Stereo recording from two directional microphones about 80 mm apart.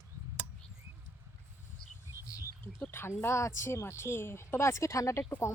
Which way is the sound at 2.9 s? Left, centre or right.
Left.